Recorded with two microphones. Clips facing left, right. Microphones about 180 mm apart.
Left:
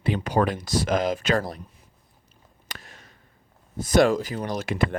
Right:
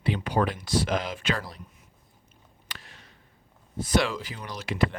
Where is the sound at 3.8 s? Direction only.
45° left (ahead or behind).